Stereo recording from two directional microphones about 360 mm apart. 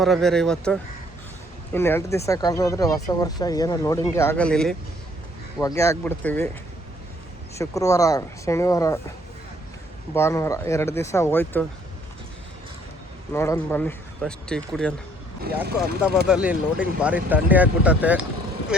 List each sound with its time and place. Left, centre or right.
0.0 s speech: centre
7.6 s speech: centre
10.2 s speech: centre
13.3 s speech: centre
15.5 s speech: right
16.2 s speech: centre